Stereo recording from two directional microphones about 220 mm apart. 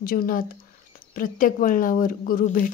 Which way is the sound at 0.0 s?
40° left (ahead or behind).